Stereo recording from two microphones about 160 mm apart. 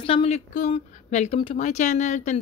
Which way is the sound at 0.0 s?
35° left (ahead or behind).